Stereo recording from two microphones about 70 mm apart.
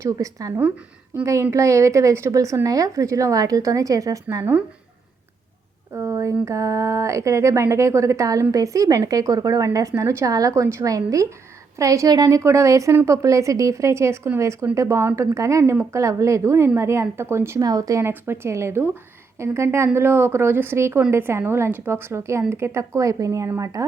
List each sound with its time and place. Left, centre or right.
0.0 s speech: right
5.9 s speech: right
12.4 s speech: right
17.6 s speech: right
18.0 s a woman's voice: right